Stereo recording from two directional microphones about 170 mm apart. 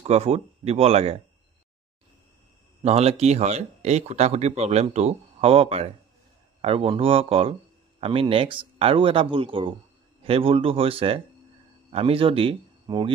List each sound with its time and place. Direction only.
0.0 s speech: 40° right (ahead or behind)
2.8 s speech: 40° right (ahead or behind)